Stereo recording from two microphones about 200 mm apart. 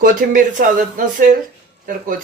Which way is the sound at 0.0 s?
40° right (ahead or behind).